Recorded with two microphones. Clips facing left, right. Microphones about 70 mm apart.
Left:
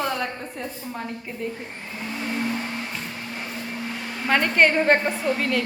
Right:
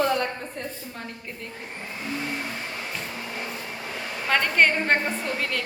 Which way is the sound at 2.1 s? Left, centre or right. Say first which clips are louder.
Left 3 dB; centre.